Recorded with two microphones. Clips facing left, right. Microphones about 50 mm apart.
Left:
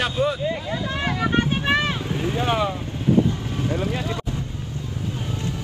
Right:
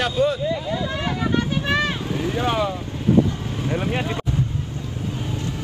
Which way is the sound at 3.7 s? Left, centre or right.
Right.